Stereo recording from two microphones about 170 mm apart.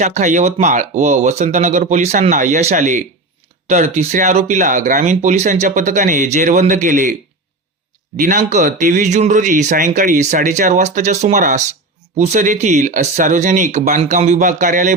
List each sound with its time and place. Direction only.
0.0 s speech: 45° right (ahead or behind)
8.1 s speech: 50° right (ahead or behind)